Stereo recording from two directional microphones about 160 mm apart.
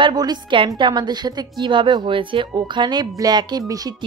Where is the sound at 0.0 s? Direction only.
25° right (ahead or behind).